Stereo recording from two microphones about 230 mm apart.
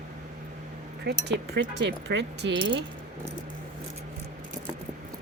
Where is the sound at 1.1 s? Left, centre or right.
Right.